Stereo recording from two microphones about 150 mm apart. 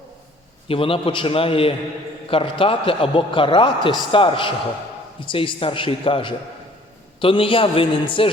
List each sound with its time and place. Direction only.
0.7 s a man's voice: 35° left (ahead or behind)